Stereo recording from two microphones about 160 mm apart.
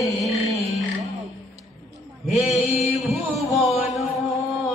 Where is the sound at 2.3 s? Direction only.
Centre (ahead or behind).